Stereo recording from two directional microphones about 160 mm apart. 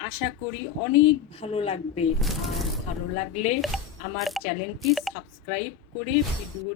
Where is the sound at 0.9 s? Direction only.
35° left (ahead or behind).